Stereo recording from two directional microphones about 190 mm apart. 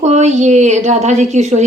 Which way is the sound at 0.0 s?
35° right (ahead or behind).